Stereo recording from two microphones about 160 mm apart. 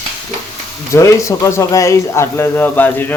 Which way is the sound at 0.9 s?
20° left (ahead or behind).